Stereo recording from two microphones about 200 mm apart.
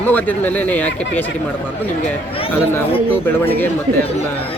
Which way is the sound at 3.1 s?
10° left (ahead or behind).